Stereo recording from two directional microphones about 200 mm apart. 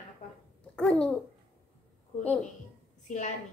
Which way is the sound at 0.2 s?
40° left (ahead or behind).